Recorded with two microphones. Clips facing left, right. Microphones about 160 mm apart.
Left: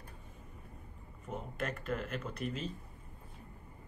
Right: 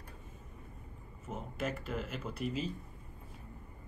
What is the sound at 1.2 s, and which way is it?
Speech, 5° right (ahead or behind).